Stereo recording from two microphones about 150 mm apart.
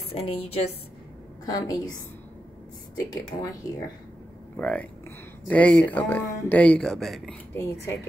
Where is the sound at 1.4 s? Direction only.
25° left (ahead or behind).